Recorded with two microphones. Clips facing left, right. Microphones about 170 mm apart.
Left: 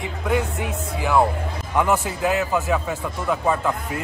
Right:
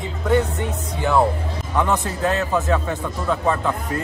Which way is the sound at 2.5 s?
Centre (ahead or behind).